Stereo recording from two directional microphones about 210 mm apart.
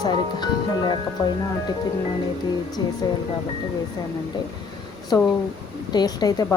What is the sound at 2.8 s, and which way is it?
Speech, 20° left (ahead or behind).